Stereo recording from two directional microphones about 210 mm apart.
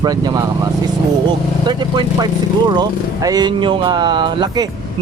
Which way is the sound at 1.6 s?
20° right (ahead or behind).